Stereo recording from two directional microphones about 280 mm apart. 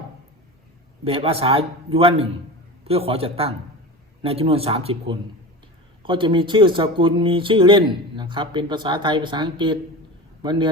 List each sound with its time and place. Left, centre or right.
1.0 s a man's voice: right